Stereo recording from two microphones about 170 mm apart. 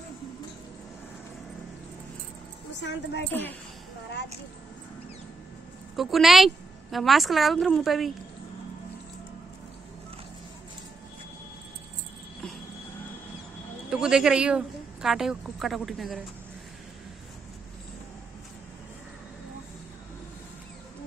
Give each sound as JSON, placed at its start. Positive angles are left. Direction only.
{"t": 2.8, "sound": "a woman's voice", "side_deg": 90}
{"t": 3.3, "sound": "a woman's voice", "side_deg": 10}
{"t": 5.9, "sound": "a woman's voice", "side_deg": 0}
{"t": 13.8, "sound": "speech", "side_deg": -5}